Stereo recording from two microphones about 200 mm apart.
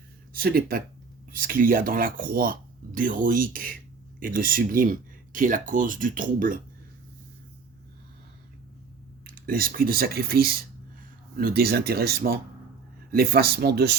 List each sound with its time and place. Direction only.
0.3 s speech: 50° right (ahead or behind)
9.3 s speech: 45° right (ahead or behind)